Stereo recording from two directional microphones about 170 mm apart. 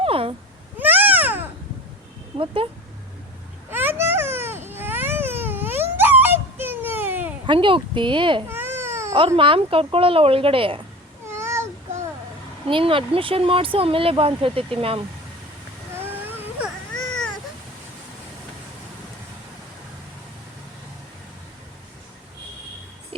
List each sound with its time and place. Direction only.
0.0 s cat: 35° right (ahead or behind)
0.8 s a sound: 10° right (ahead or behind)
2.6 s speech: 35° right (ahead or behind)
3.7 s a sound: 10° right (ahead or behind)
7.4 s speech: 30° right (ahead or behind)
8.4 s baby cry: 15° right (ahead or behind)
9.1 s speech: 30° right (ahead or behind)
11.3 s a sound: 15° right (ahead or behind)
12.6 s speech: 30° right (ahead or behind)